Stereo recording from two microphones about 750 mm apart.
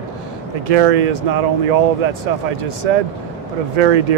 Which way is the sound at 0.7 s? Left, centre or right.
Right.